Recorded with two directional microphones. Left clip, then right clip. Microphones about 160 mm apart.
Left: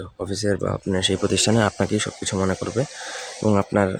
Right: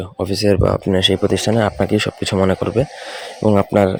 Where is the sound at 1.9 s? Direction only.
25° right (ahead or behind).